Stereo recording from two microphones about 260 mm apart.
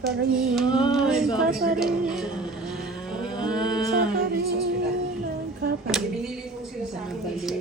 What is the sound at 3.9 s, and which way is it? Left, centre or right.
Music, right.